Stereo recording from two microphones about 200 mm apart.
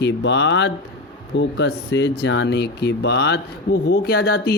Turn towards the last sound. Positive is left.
turn(degrees=50)  # may be behind; listen again after turning